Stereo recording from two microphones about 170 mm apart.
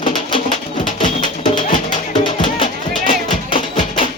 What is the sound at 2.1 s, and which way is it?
Music, 30° left (ahead or behind).